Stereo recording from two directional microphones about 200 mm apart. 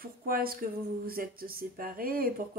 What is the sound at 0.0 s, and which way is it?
Speech, 45° right (ahead or behind).